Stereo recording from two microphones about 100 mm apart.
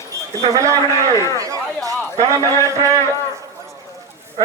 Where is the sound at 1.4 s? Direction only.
35° right (ahead or behind).